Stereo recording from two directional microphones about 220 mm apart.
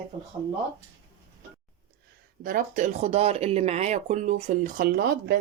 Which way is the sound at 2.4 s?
40° right (ahead or behind).